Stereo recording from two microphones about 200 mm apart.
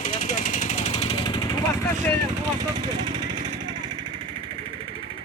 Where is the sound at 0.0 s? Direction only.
40° left (ahead or behind); by 1.5 s 25° left (ahead or behind).